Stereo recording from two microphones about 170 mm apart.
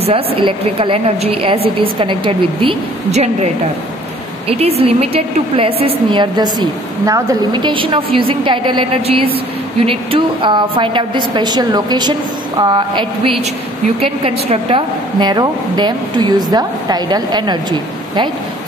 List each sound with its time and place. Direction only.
0.0 s a woman's voice: 30° right (ahead or behind)
4.5 s a woman's voice: 35° right (ahead or behind)